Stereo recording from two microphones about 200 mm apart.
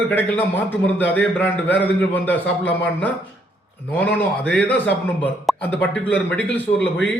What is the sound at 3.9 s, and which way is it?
A man's voice, 10° left (ahead or behind).